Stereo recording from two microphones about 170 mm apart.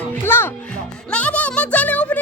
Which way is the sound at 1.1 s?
5° left (ahead or behind).